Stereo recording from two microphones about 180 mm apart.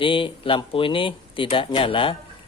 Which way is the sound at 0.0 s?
30° left (ahead or behind).